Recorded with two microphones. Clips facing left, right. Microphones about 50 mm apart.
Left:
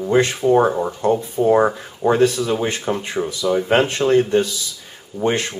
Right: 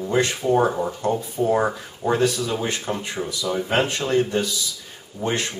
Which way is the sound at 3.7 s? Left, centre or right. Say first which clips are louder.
Left 2 dB; left.